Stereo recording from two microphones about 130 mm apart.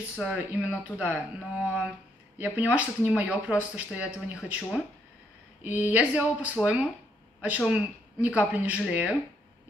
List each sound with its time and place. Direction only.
0.1 s speech: 10° right (ahead or behind)
5.6 s speech: 10° right (ahead or behind)